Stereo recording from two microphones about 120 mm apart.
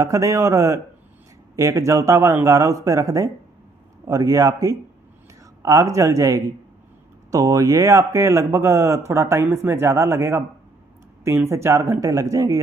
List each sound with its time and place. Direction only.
0.0 s speech: 25° right (ahead or behind)